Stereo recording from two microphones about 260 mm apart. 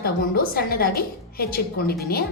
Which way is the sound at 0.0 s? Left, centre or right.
Left.